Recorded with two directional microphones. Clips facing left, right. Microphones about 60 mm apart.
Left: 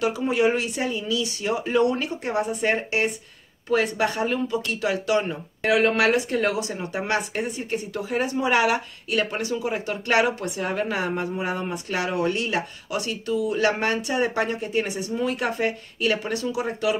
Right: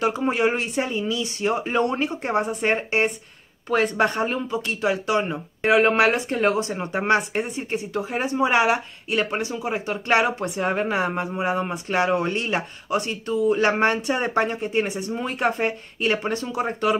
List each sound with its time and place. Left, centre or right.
0.0 s speech: right
3.7 s speech: right